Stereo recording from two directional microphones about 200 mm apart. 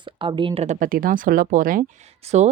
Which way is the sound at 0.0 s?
25° right (ahead or behind).